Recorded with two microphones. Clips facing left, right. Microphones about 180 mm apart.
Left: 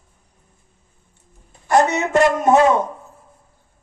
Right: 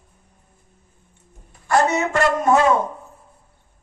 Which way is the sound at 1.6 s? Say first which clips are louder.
Left 2 dB; 20° left (ahead or behind).